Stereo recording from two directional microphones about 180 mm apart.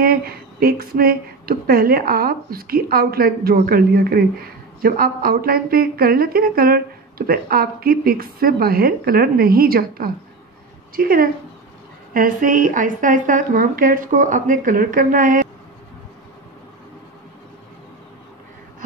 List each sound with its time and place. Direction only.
0.0 s a woman's voice: 55° right (ahead or behind)